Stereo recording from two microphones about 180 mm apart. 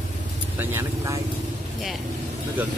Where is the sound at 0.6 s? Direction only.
15° right (ahead or behind).